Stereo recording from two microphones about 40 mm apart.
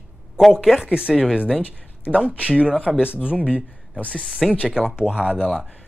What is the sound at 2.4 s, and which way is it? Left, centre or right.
Speech, right.